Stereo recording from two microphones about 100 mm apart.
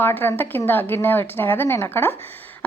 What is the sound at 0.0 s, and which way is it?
Speech, 20° left (ahead or behind).